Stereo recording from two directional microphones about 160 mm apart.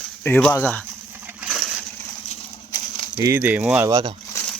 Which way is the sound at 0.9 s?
10° right (ahead or behind).